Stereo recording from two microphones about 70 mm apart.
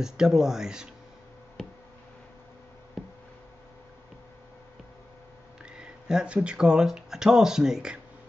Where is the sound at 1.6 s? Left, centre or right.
Centre.